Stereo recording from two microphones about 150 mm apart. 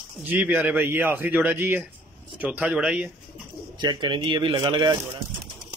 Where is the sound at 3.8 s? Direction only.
30° right (ahead or behind).